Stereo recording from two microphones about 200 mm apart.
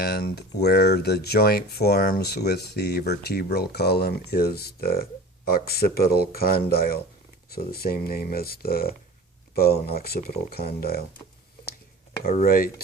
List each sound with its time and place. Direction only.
0.0 s speech: 50° left (ahead or behind)
12.2 s speech: 40° left (ahead or behind)